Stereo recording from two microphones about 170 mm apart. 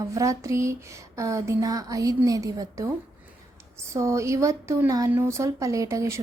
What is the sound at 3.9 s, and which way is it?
Speech, 15° right (ahead or behind).